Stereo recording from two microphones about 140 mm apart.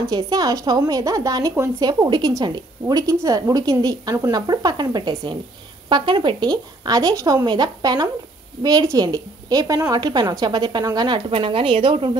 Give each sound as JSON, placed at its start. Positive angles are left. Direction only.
{"t": 0.1, "sound": "a woman's voice", "side_deg": -30}